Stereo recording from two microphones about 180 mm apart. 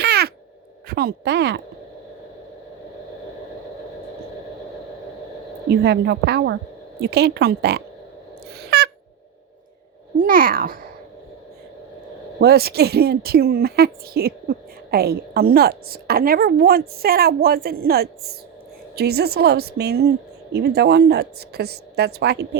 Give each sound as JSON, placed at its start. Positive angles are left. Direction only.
{"t": 0.0, "sound": "a sound", "side_deg": -65}
{"t": 0.9, "sound": "a woman's voice", "side_deg": -60}
{"t": 5.6, "sound": "a woman's voice", "side_deg": -65}
{"t": 8.5, "sound": "owl", "side_deg": -65}
{"t": 10.2, "sound": "a child's voice", "side_deg": -50}
{"t": 12.4, "sound": "a woman's voice", "side_deg": -60}